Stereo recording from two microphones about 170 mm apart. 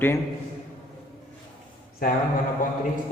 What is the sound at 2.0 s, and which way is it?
Speech, 60° left (ahead or behind).